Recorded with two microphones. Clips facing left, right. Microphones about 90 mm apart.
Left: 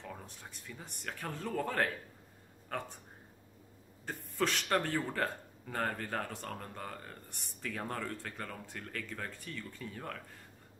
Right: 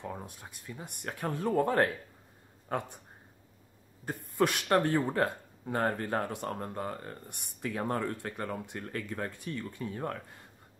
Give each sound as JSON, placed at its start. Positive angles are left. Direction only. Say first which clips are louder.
{"t": 0.0, "sound": "speech", "louder": "right 6 dB", "side_deg": -15}
{"t": 4.4, "sound": "speech", "louder": "right 5 dB", "side_deg": -15}